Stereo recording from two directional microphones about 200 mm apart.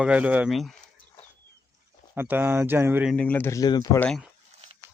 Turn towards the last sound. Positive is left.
turn(degrees=0)  # may be behind; listen again after turning